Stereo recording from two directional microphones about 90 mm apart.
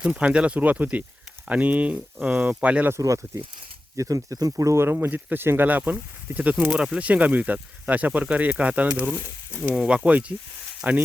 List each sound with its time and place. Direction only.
0.0 s speech: 10° right (ahead or behind)
2.9 s speech: 35° right (ahead or behind); by 6.7 s 15° right (ahead or behind)
6.7 s speech: 5° right (ahead or behind)
6.9 s speech: 15° right (ahead or behind)